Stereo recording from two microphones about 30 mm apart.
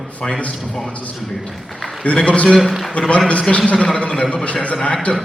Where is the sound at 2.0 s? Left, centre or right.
Left.